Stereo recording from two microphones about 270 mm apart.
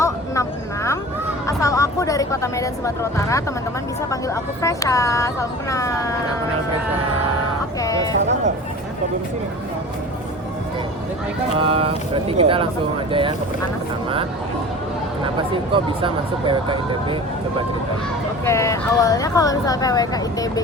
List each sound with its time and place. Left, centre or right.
0.0 s a sound: centre
1.5 s speech: centre
7.8 s a sound: centre
11.6 s speech: right
15.2 s speech: centre
18.4 s speech: centre